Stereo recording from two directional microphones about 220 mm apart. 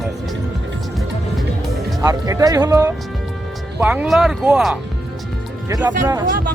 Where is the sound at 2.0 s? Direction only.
15° right (ahead or behind).